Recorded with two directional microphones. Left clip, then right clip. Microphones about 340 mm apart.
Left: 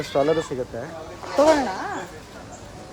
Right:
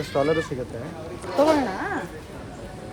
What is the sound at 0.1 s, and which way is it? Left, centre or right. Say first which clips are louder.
Speech: left 2 dB; left.